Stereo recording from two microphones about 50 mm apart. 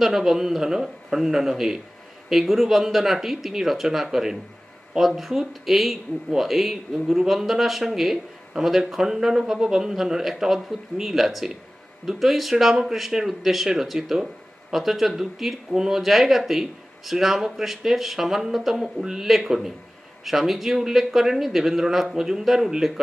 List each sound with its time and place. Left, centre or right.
0.0 s a woman's voice: centre